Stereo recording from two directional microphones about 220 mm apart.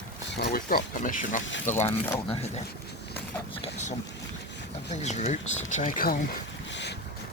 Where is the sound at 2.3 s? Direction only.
30° left (ahead or behind).